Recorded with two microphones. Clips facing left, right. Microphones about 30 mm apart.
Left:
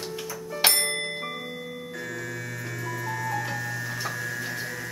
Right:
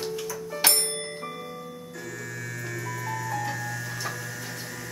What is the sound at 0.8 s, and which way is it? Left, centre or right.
Music, left.